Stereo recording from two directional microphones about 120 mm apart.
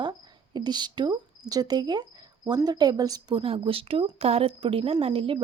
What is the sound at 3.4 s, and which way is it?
A woman's voice, 45° right (ahead or behind).